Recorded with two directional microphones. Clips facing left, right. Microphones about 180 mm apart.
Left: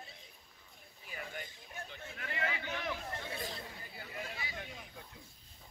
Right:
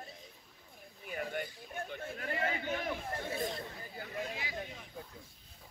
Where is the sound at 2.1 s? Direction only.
40° right (ahead or behind).